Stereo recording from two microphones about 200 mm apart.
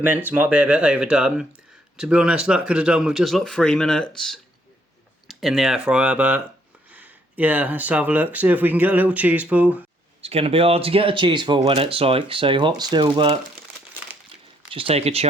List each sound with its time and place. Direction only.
0.3 s speech: 10° right (ahead or behind)
10.2 s speech: 30° right (ahead or behind)
14.7 s speech: 25° right (ahead or behind)